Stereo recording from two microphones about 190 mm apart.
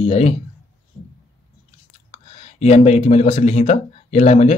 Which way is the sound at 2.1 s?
35° left (ahead or behind).